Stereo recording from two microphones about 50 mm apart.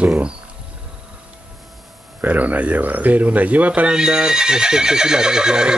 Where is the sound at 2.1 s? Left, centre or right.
Right.